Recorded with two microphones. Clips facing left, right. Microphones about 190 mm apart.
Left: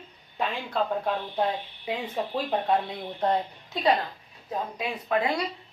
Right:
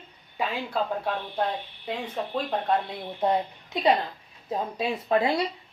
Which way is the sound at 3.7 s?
20° right (ahead or behind).